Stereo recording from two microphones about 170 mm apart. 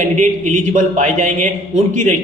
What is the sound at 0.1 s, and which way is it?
Speech, 45° right (ahead or behind).